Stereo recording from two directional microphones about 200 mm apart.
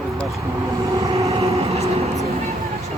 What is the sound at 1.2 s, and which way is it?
Vehicle, 30° right (ahead or behind).